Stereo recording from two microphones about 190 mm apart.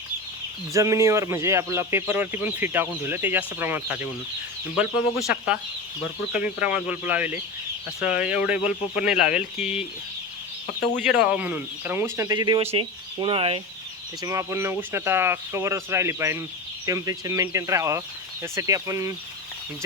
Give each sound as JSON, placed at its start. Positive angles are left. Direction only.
{"t": 0.7, "sound": "speech", "side_deg": -15}
{"t": 6.6, "sound": "speech", "side_deg": -5}
{"t": 11.0, "sound": "speech", "side_deg": -5}
{"t": 14.2, "sound": "speech", "side_deg": -15}